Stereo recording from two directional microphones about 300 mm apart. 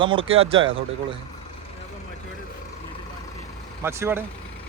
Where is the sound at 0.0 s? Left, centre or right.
Centre.